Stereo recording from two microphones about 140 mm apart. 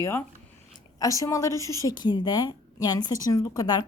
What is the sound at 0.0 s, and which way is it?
A woman's voice, 15° left (ahead or behind).